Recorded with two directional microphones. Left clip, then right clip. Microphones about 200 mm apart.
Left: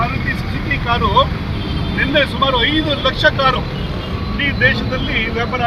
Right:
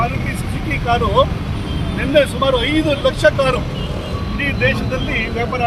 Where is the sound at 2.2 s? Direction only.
20° right (ahead or behind).